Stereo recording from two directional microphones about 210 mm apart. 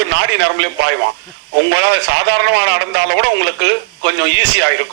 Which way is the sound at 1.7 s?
60° right (ahead or behind).